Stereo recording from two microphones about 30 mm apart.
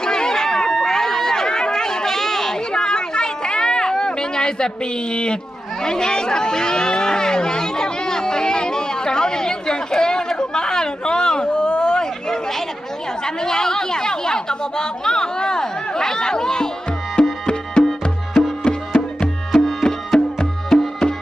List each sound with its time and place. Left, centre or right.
0.0 s a sound: left
12.3 s chatter: centre
13.2 s speech: left
17.4 s music: left
20.7 s music: centre